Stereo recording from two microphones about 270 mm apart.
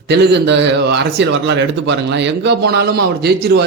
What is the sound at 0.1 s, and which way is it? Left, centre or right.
A man's voice, right.